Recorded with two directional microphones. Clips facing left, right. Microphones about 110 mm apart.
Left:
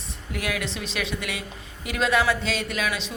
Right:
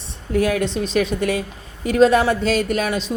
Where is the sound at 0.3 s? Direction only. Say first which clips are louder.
Right 11 dB; 35° right (ahead or behind).